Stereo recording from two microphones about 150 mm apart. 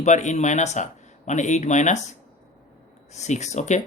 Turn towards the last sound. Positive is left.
turn(degrees=50)  # may be behind; listen again after turning